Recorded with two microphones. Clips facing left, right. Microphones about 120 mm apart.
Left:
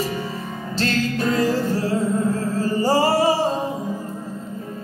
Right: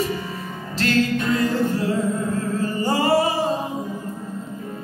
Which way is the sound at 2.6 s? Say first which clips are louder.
Left 5 dB; 30° left (ahead or behind).